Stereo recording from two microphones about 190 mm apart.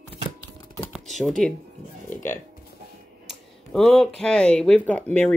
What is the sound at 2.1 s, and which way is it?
Music, 10° left (ahead or behind).